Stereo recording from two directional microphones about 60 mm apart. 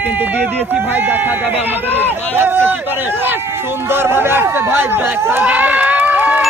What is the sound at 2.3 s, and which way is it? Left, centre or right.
Speech, right.